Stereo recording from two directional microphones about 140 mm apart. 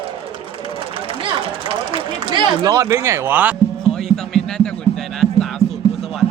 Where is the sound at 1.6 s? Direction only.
40° right (ahead or behind); by 3.5 s 15° right (ahead or behind).